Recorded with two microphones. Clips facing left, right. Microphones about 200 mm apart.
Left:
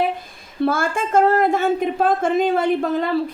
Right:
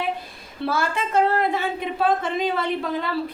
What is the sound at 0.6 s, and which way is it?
Speech, 50° left (ahead or behind).